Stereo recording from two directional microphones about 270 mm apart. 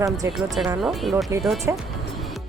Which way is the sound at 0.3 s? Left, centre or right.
Centre.